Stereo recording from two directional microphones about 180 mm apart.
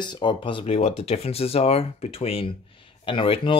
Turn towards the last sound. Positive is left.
turn(degrees=30)  # may be behind; listen again after turning